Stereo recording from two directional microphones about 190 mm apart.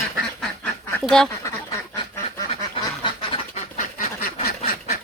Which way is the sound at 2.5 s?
30° left (ahead or behind).